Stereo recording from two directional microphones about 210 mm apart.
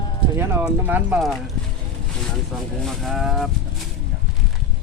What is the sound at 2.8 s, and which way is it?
Speech, centre (ahead or behind).